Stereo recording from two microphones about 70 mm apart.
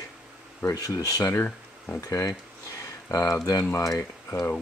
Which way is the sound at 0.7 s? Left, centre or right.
Left.